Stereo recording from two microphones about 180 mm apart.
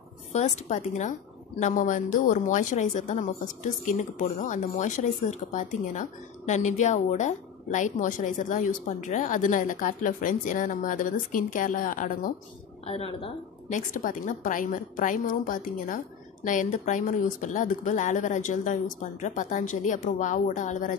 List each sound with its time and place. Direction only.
0.3 s a woman's voice: 40° left (ahead or behind)
12.8 s a woman's voice: 35° left (ahead or behind)